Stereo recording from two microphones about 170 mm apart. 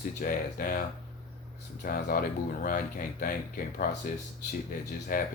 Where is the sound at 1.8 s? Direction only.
55° left (ahead or behind).